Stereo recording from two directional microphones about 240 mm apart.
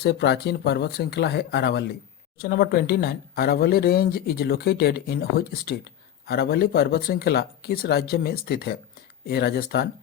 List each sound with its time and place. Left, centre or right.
0.0 s speech: left